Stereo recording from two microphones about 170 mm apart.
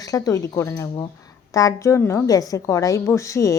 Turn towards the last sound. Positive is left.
turn(degrees=20)  # may be behind; listen again after turning